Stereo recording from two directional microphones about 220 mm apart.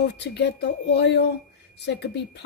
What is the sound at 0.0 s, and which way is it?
A woman's voice, 50° left (ahead or behind).